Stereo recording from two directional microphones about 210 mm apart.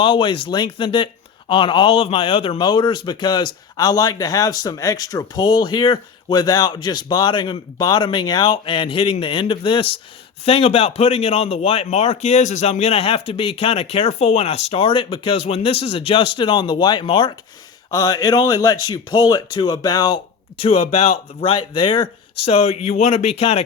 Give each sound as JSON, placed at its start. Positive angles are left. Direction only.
{"t": 0.0, "sound": "speech", "side_deg": 25}